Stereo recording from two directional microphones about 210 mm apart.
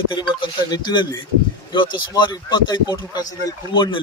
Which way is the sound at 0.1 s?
20° left (ahead or behind).